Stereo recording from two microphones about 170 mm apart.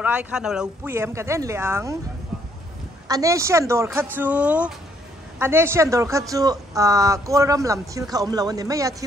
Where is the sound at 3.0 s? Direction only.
20° right (ahead or behind).